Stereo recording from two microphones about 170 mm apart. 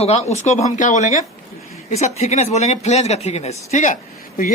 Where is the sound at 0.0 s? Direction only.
40° left (ahead or behind).